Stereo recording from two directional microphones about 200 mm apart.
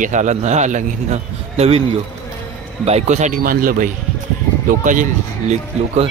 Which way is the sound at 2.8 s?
35° right (ahead or behind).